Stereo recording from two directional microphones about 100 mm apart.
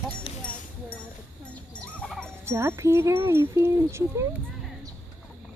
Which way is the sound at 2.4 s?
25° right (ahead or behind).